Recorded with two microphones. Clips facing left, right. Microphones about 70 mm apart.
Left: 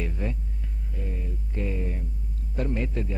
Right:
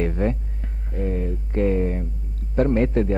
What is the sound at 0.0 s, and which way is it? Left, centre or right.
Music, right.